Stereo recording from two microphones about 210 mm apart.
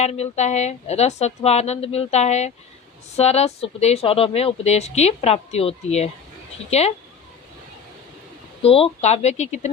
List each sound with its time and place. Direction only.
0.0 s a woman's voice: 30° left (ahead or behind)
8.6 s a woman's voice: 25° left (ahead or behind)